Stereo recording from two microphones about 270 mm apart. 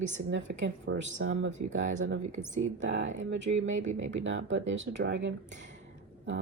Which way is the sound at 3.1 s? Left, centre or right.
Right.